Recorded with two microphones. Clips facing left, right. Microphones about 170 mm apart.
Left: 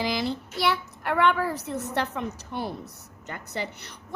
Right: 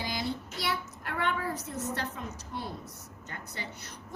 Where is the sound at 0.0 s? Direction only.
90° left.